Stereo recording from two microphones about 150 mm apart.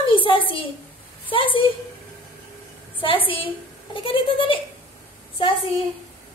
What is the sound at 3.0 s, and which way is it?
A woman's voice, 35° left (ahead or behind).